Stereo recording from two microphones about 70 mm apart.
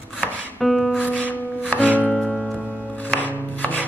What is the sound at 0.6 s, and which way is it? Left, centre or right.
Music, centre.